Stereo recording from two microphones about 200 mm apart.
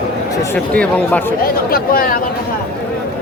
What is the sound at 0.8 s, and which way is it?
Speech, 10° left (ahead or behind).